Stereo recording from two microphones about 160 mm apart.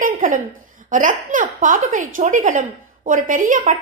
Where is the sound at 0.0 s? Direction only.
55° right (ahead or behind).